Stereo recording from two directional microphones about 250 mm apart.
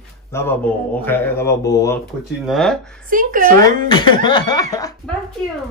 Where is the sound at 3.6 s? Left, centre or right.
Centre.